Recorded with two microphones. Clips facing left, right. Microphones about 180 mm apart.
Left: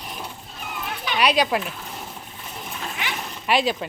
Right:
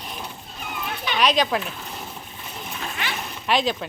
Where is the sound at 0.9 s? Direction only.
5° left (ahead or behind).